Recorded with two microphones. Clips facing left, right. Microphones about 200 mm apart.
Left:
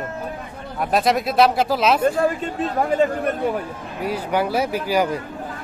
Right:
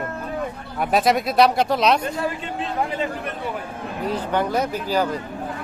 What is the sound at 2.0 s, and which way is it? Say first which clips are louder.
Speech: left 7 dB; 45° left (ahead or behind).